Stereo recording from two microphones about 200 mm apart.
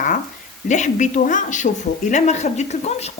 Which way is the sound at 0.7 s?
35° left (ahead or behind).